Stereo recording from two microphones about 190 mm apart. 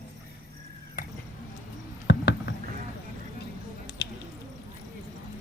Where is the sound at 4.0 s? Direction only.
65° left (ahead or behind).